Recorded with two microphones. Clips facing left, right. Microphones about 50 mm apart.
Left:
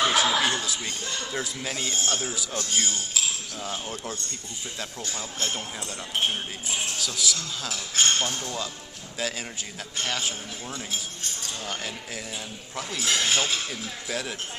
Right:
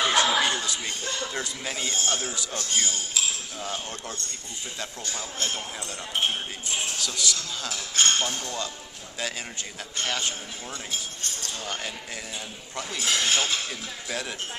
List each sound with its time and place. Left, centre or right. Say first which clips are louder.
0.0 s speech: even; centre
6.7 s speech: even; centre
10.0 s speech: even; centre